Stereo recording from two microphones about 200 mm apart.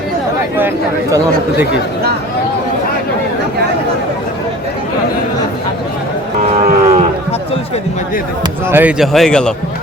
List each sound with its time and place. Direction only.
6.5 s moo: 35° right (ahead or behind)
8.6 s speech: 10° right (ahead or behind)